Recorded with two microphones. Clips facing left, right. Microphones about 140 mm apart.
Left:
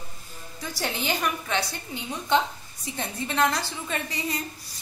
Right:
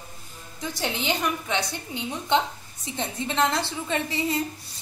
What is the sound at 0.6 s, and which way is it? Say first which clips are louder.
A woman's voice: right 2 dB; 20° right (ahead or behind).